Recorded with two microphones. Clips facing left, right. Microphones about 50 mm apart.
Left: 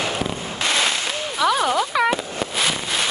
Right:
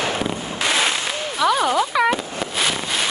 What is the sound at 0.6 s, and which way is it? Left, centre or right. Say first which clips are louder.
Fireworks: right 1 dB; centre.